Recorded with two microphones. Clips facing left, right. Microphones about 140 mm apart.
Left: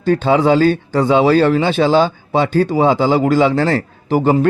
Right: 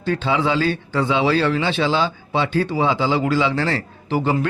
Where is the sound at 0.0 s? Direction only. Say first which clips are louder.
Left 7 dB; 45° left (ahead or behind).